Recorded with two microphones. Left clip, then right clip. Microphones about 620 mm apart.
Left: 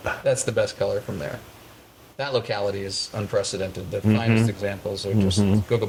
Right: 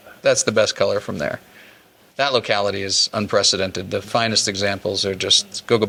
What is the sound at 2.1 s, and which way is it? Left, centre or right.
Speech, right.